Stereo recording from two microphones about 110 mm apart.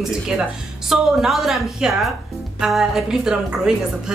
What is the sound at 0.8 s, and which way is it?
A woman's voice, centre (ahead or behind).